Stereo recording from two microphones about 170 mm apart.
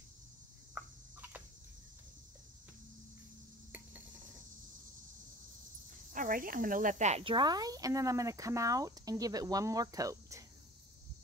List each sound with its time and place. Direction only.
6.1 s speech: 55° right (ahead or behind); by 10.4 s 20° right (ahead or behind)